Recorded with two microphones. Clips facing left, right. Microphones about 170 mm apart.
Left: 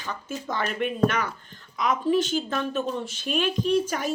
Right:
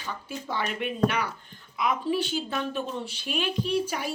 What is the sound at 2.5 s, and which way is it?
Speech, 15° right (ahead or behind).